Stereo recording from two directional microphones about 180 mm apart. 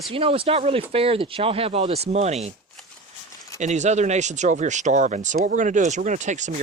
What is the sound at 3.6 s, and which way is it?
Speech, 40° right (ahead or behind).